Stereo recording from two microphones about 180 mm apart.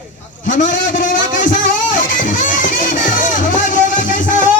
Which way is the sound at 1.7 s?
45° left (ahead or behind).